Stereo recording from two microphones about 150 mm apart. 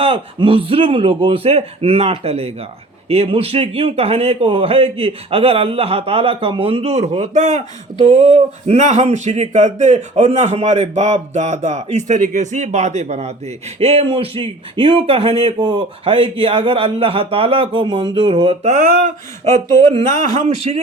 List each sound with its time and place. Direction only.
0.0 s a man's voice: 35° right (ahead or behind)
18.7 s speech: 55° right (ahead or behind)
19.5 s speech: 20° left (ahead or behind)
20.3 s speech: 50° right (ahead or behind)